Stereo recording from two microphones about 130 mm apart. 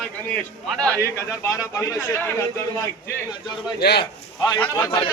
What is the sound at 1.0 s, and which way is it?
A man's voice, 20° left (ahead or behind).